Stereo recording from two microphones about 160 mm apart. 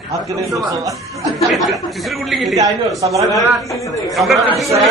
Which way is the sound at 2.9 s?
20° right (ahead or behind).